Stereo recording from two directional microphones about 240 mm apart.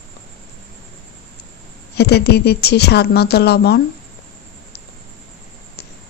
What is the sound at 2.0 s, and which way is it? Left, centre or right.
Speech, left.